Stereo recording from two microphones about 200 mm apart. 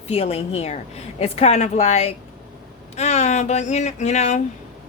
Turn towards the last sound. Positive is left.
turn(degrees=35)  # may be behind; listen again after turning